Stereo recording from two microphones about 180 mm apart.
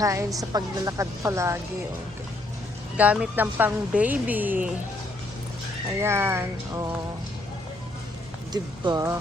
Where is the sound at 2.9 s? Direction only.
5° right (ahead or behind).